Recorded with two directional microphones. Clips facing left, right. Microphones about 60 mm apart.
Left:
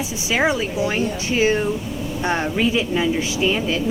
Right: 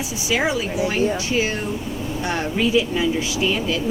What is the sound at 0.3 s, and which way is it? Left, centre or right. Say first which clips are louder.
Speech: left 2 dB; left.